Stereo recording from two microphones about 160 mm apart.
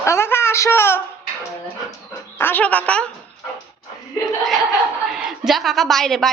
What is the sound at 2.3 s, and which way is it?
Speech, 10° left (ahead or behind).